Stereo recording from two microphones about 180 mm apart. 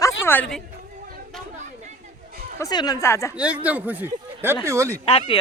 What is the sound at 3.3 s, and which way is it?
Speech, 5° right (ahead or behind).